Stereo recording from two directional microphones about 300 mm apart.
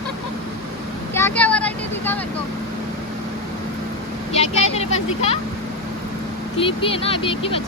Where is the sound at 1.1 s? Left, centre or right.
Centre.